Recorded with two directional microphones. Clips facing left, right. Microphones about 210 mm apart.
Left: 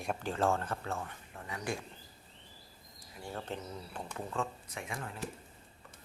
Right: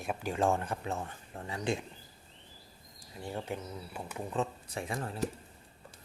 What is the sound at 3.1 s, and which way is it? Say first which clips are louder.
Speech: right 3 dB; 20° right (ahead or behind).